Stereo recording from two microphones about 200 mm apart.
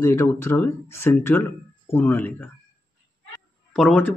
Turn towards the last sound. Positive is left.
turn(degrees=5)  # may be behind; listen again after turning